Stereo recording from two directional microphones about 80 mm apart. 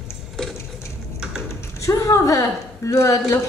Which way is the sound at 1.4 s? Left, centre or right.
Left.